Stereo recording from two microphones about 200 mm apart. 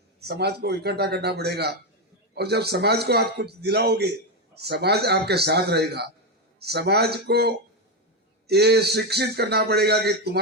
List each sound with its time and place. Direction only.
0.2 s a man's voice: 55° right (ahead or behind)